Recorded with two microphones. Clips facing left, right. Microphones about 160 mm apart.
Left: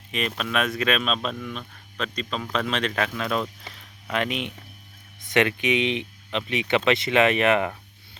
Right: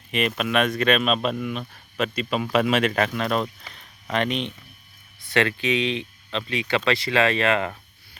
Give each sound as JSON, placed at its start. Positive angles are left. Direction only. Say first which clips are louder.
{"t": 0.1, "sound": "speech", "louder": "right 4 dB", "side_deg": 0}
{"t": 5.2, "sound": "speech", "louder": "left 1 dB", "side_deg": 20}